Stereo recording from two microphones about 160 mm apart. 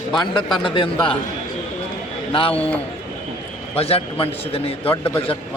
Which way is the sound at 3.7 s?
40° left (ahead or behind).